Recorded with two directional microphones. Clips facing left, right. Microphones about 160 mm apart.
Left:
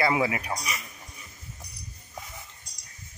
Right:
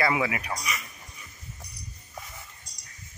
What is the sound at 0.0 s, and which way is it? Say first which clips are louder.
Speech: left 1 dB; 30° left (ahead or behind).